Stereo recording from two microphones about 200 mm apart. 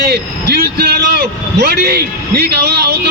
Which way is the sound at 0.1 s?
50° right (ahead or behind).